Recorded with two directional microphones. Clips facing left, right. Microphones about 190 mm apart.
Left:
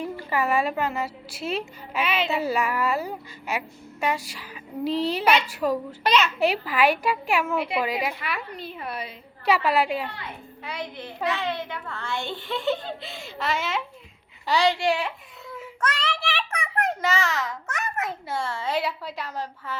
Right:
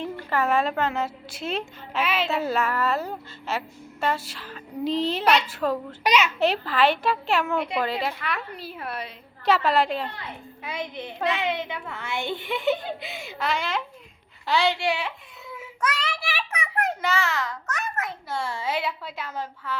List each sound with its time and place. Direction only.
0.0 s a woman's voice: 10° left (ahead or behind)
2.4 s a woman's voice: 10° left (ahead or behind)
6.0 s a child's voice: 10° right (ahead or behind)
6.4 s a woman's voice: 10° left (ahead or behind)
8.5 s a woman's voice: 5° right (ahead or behind)
10.6 s a woman's voice: 20° right (ahead or behind)
13.4 s a woman's voice: centre (ahead or behind)
15.5 s child singing: 10° right (ahead or behind)
17.4 s a child's voice: 20° left (ahead or behind)
18.3 s a woman's voice: 10° right (ahead or behind)